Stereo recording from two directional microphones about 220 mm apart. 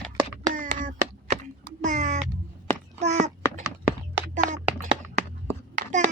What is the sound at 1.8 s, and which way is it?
Cat, 35° right (ahead or behind).